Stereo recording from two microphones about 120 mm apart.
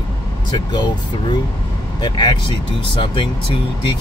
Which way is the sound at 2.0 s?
40° left (ahead or behind).